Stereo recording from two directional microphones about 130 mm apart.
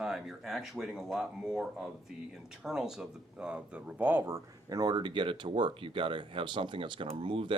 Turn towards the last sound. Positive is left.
turn(degrees=-40)  # may be behind; listen again after turning